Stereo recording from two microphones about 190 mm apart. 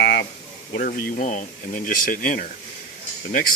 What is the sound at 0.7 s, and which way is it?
Speech, 50° left (ahead or behind).